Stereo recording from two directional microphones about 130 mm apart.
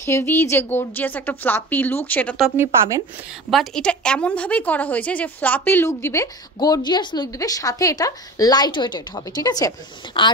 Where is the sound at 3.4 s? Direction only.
5° left (ahead or behind).